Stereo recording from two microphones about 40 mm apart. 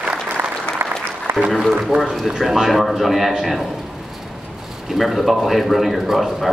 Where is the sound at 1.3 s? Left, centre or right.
Right.